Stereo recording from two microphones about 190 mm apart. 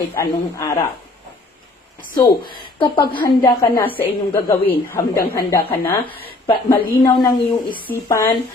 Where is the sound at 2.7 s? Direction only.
25° left (ahead or behind).